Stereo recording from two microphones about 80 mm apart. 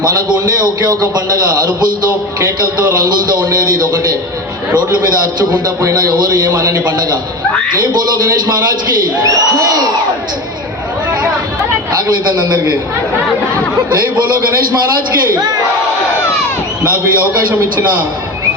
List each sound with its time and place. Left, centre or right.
0.0 s a man's voice: right
3.0 s a man's voice: right
5.5 s a man's voice: right
9.2 s speech: right
12.0 s a man's voice: right
16.8 s a man's voice: right